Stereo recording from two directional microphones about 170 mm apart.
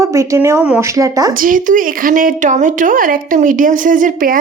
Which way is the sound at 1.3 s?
55° right (ahead or behind).